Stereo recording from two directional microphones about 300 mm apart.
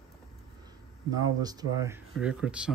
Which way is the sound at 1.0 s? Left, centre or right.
Centre.